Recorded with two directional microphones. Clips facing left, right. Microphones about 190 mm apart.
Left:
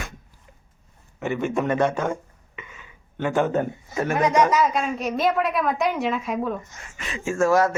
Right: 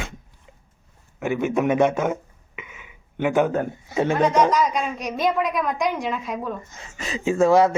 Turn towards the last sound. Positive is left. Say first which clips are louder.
# right 3 dB
turn(degrees=-20)  # may be behind; listen again after turning